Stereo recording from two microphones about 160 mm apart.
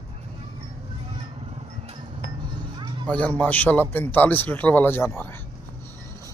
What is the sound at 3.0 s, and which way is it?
A man's voice, 5° left (ahead or behind).